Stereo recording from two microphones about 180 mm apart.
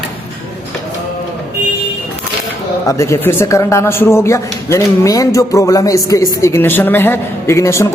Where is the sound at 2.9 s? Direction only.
15° left (ahead or behind).